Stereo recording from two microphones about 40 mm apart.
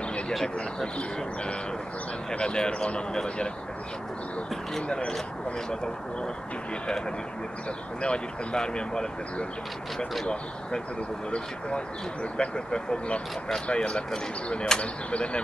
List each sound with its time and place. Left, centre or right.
2.3 s speech: left
4.8 s speech: left
8.0 s speech: left